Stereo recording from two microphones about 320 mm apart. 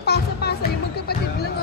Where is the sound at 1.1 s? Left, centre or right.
Left.